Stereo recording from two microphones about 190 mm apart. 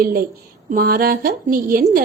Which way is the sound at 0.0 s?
50° right (ahead or behind).